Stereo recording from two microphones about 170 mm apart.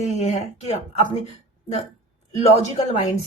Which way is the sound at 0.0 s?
40° left (ahead or behind).